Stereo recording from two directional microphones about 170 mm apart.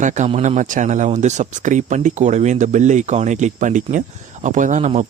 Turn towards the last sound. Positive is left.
turn(degrees=-45)  # may be behind; listen again after turning